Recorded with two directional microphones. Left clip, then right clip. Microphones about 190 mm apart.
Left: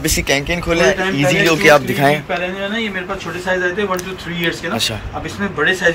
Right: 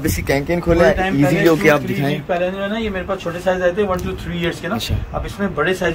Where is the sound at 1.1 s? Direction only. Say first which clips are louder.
Left 1 dB; 30° right (ahead or behind).